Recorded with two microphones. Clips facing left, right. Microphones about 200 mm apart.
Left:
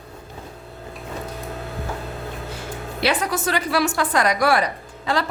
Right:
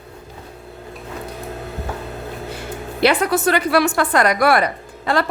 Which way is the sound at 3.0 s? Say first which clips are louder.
Right 6 dB; 60° right (ahead or behind).